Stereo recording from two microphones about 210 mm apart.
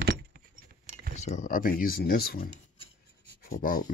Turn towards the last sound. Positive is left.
turn(degrees=40)  # may be behind; listen again after turning